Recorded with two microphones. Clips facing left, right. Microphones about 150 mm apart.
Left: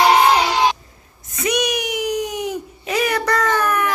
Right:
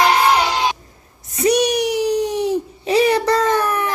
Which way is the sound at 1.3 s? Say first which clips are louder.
Right 5 dB; 35° right (ahead or behind).